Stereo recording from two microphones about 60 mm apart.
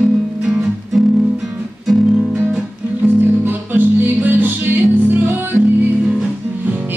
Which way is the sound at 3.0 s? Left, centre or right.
Right.